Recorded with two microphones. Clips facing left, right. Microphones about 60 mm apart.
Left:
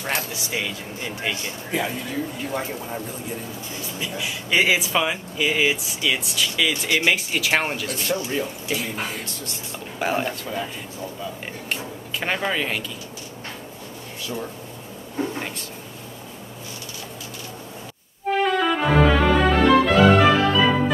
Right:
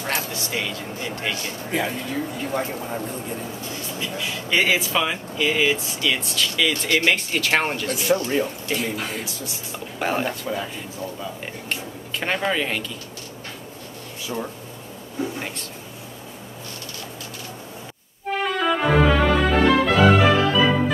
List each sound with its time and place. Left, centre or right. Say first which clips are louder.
0.3 s speech: right 1 dB; centre
4.2 s speech: left 1 dB; centre
11.7 s speech: left 1 dB; centre
14.2 s speech: right 2 dB; centre
18.3 s music: left 2 dB; centre